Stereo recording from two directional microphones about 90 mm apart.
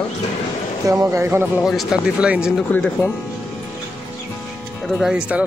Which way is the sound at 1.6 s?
Centre (ahead or behind).